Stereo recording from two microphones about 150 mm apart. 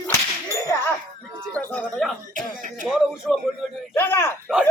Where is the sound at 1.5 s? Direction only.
5° left (ahead or behind).